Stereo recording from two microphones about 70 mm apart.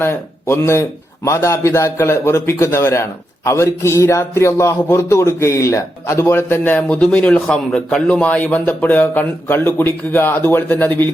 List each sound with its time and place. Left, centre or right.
0.0 s a man's voice: left
6.7 s a man's voice: left